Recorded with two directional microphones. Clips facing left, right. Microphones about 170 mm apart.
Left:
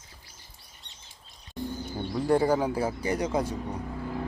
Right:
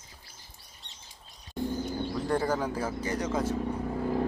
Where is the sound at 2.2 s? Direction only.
10° left (ahead or behind).